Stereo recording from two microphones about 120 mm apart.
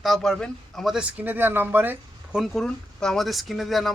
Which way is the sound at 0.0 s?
Centre (ahead or behind).